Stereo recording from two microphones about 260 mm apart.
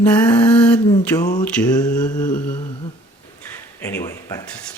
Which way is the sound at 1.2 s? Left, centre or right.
Left.